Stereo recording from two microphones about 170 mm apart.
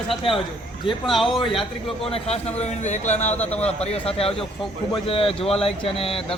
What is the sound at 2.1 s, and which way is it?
Speech, 40° left (ahead or behind).